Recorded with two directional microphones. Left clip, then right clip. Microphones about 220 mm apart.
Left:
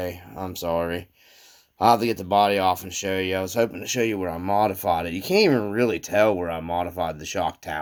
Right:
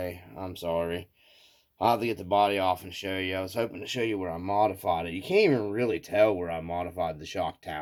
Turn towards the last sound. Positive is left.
turn(degrees=25)  # may be behind; listen again after turning